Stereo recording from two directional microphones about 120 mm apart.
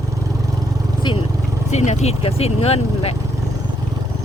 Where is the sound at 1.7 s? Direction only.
70° left (ahead or behind).